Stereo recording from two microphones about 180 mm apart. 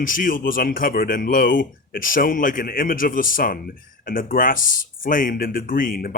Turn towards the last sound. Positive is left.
turn(degrees=50)  # may be behind; listen again after turning